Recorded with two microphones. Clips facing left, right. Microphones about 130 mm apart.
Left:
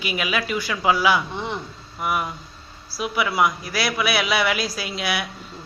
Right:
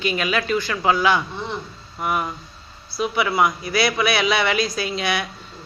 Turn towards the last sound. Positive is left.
turn(degrees=5)  # may be behind; listen again after turning